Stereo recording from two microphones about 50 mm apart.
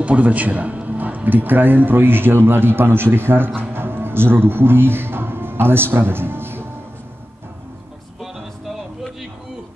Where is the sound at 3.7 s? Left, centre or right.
Right.